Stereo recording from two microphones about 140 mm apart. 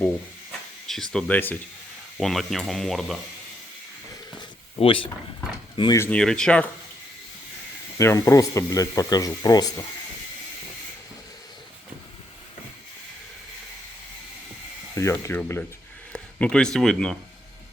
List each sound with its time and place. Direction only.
0.9 s speech: 5° left (ahead or behind)
2.1 s speech: centre (ahead or behind)
4.8 s speech: 40° left (ahead or behind)
6.0 s speech: 10° left (ahead or behind)
7.9 s speech: 20° left (ahead or behind)
14.9 s a man's voice: 20° left (ahead or behind); by 17.2 s 5° left (ahead or behind)